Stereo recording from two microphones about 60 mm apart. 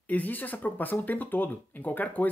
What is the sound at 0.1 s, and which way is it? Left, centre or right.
Speech, left.